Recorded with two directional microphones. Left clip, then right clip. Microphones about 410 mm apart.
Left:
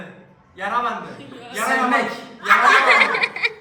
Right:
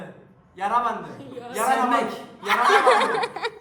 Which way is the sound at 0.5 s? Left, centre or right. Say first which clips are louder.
Left 1 dB; centre.